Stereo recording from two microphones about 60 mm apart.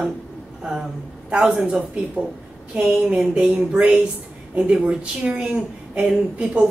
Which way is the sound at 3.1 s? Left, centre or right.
Centre.